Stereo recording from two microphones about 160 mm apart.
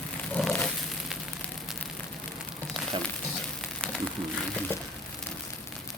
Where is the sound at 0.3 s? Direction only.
5° left (ahead or behind).